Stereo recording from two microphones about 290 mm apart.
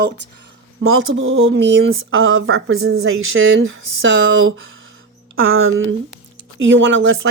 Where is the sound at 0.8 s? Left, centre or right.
Right.